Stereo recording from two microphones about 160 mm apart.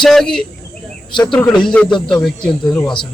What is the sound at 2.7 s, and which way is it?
Speech, 25° left (ahead or behind).